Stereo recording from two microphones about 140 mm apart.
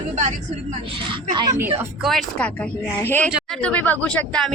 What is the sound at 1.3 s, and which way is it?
Speech, 30° right (ahead or behind).